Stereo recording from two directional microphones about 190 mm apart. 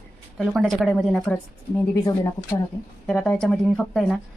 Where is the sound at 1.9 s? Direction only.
15° left (ahead or behind).